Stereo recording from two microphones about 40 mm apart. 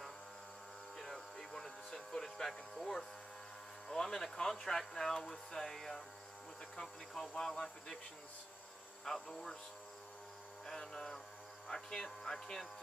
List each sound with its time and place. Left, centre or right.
0.9 s a sound: centre
3.9 s speech: centre
9.0 s speech: centre
10.7 s speech: centre